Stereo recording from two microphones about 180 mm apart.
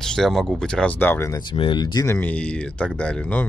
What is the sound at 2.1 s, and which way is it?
Speech, 5° left (ahead or behind).